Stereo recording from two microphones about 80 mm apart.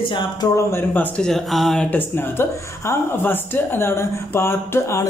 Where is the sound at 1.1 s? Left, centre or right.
Centre.